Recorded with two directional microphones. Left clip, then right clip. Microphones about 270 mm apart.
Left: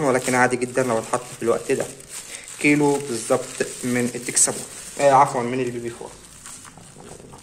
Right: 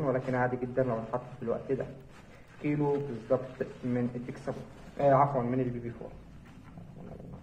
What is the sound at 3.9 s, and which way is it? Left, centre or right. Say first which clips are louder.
Speech: left 9 dB; left.